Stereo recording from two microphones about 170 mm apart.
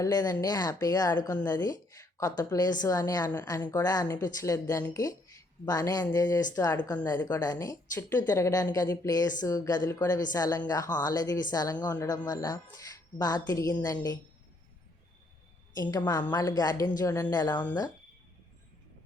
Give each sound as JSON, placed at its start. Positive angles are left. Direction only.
{"t": 0.0, "sound": "a woman's voice", "side_deg": 20}
{"t": 15.7, "sound": "a woman's voice", "side_deg": 20}